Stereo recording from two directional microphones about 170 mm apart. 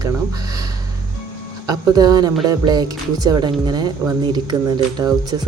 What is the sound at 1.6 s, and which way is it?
Speech, 20° right (ahead or behind).